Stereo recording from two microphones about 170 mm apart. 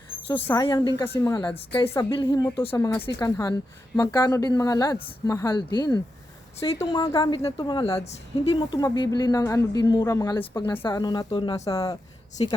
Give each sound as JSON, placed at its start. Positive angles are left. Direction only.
{"t": 0.4, "sound": "speech", "side_deg": 25}
{"t": 1.0, "sound": "a woman's voice", "side_deg": 15}
{"t": 4.9, "sound": "a woman's voice", "side_deg": 30}
{"t": 5.3, "sound": "speech", "side_deg": 20}